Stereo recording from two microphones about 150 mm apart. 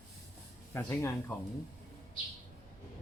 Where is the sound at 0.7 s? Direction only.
15° left (ahead or behind).